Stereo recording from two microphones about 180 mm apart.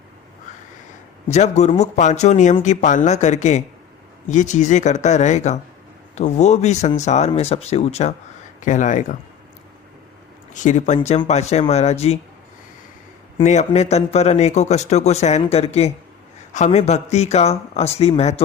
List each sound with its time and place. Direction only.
1.3 s speech: 40° left (ahead or behind)
10.5 s speech: 45° left (ahead or behind)
13.4 s speech: 40° left (ahead or behind)